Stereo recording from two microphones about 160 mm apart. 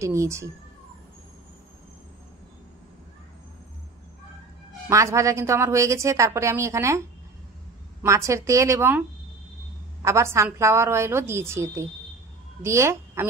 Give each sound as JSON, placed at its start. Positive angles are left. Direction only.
{"t": 0.0, "sound": "a woman's voice", "side_deg": -20}
{"t": 4.8, "sound": "a woman's voice", "side_deg": -20}
{"t": 8.0, "sound": "a woman's voice", "side_deg": -20}
{"t": 10.0, "sound": "a woman's voice", "side_deg": -15}